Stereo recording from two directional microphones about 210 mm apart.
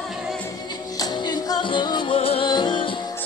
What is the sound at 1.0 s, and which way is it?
Music, 20° left (ahead or behind).